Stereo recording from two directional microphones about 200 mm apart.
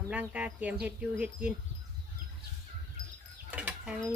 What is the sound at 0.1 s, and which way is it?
Speech, 5° right (ahead or behind).